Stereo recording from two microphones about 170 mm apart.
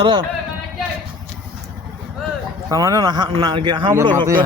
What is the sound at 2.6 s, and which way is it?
Speech, 20° right (ahead or behind).